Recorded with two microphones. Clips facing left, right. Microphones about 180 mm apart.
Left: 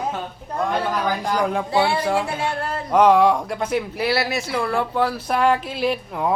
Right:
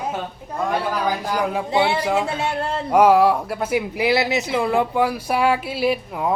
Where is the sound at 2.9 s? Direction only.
10° right (ahead or behind).